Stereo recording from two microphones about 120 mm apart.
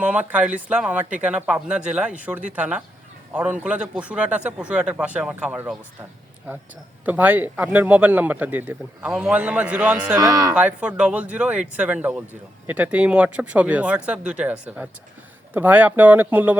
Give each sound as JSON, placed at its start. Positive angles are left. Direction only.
{"t": 0.0, "sound": "speech", "side_deg": -10}
{"t": 7.0, "sound": "speech", "side_deg": -15}
{"t": 10.2, "sound": "speech", "side_deg": -30}
{"t": 10.5, "sound": "speech", "side_deg": -10}